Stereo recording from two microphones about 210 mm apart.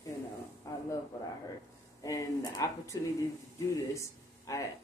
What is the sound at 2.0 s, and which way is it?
Speech, 15° left (ahead or behind).